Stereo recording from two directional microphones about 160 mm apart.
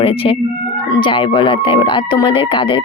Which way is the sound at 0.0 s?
35° left (ahead or behind).